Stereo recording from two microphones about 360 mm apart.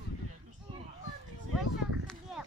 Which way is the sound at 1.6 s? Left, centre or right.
Centre.